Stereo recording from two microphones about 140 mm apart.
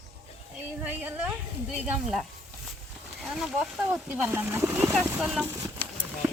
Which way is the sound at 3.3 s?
5° right (ahead or behind).